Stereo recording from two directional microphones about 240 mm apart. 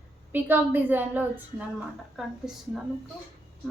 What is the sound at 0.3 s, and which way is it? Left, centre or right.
A woman's voice, centre.